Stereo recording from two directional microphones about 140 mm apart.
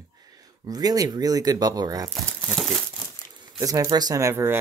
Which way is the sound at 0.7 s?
25° right (ahead or behind).